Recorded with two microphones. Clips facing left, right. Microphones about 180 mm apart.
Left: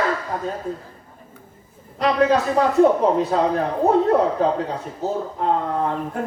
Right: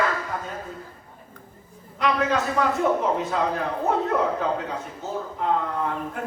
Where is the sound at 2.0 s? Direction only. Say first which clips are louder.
Left 5 dB; 35° left (ahead or behind).